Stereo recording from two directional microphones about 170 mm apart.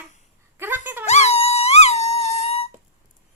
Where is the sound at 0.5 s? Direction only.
10° right (ahead or behind).